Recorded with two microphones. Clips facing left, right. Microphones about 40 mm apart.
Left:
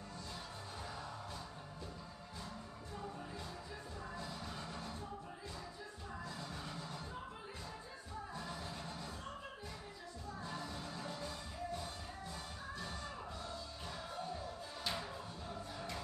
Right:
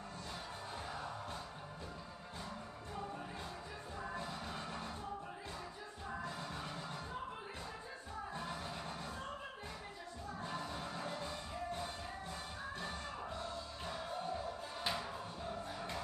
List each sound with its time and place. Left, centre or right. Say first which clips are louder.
4.1 s music: right 2 dB; right
6.2 s music: right 3 dB; right
8.4 s music: right 2 dB; right
10.4 s music: right 3 dB; right
14.2 s music: right 3 dB; right